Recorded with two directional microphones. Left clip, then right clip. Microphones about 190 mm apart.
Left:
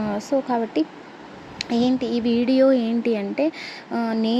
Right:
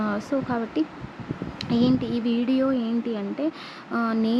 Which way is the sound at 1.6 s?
15° left (ahead or behind).